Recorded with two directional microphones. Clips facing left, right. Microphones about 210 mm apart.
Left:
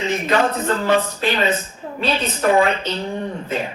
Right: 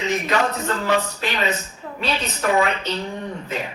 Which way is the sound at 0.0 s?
30° left (ahead or behind).